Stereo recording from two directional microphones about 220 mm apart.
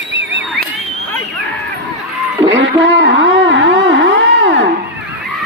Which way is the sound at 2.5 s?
55° right (ahead or behind).